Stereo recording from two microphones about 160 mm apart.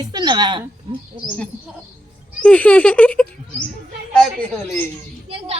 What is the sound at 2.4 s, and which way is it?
Speech, 5° left (ahead or behind).